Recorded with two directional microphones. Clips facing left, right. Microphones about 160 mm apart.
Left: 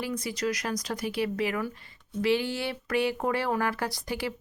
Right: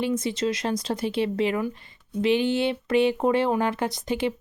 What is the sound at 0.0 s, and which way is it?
Speech, 25° right (ahead or behind).